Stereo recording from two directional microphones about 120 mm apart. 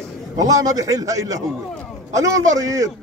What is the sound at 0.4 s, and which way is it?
A man's voice, 30° right (ahead or behind).